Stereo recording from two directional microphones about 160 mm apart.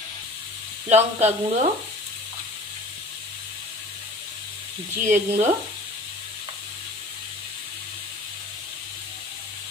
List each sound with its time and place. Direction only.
0.8 s sizzle: 45° right (ahead or behind)
5.0 s sizzle: 50° right (ahead or behind)